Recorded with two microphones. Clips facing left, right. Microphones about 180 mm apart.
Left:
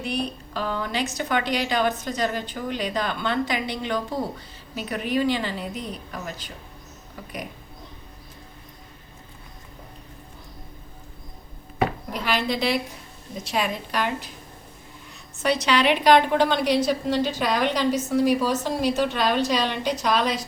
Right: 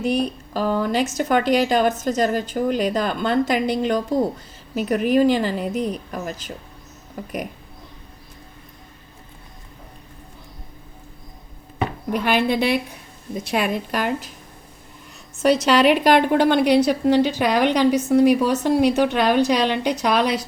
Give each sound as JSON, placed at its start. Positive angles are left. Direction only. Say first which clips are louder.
{"t": 0.0, "sound": "a woman's voice", "louder": "right 7 dB", "side_deg": -45}
{"t": 12.1, "sound": "a woman's voice", "louder": "right 6 dB", "side_deg": -55}
{"t": 15.4, "sound": "a woman's voice", "louder": "right 6 dB", "side_deg": -45}